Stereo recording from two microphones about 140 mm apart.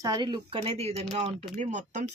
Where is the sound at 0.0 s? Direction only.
30° right (ahead or behind); by 1.0 s 45° right (ahead or behind).